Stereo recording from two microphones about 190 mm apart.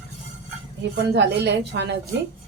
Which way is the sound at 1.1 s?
60° right (ahead or behind).